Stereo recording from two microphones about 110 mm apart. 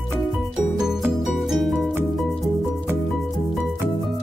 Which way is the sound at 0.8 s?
5° right (ahead or behind).